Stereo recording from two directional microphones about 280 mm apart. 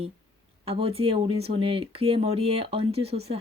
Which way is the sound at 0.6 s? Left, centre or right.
Right.